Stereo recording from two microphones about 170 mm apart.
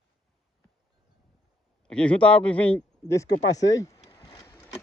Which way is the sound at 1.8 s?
5° left (ahead or behind).